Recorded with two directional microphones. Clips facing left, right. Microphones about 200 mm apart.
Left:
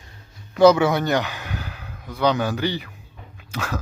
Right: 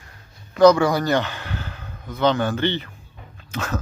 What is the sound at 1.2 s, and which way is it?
Speech, 15° left (ahead or behind).